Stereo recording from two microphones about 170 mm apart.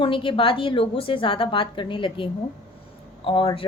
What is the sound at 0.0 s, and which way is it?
A woman's voice, 30° left (ahead or behind).